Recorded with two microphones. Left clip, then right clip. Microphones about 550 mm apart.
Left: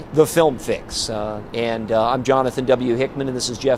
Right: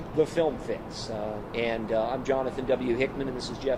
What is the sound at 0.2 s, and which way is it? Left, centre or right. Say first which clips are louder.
Speech: left 10 dB; left.